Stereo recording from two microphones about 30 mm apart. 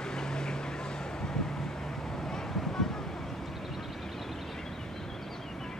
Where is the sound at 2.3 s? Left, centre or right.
Centre.